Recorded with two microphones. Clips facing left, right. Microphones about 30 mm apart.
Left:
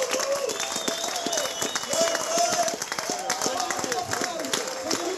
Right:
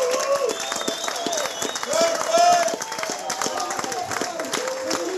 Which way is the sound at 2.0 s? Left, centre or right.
Right.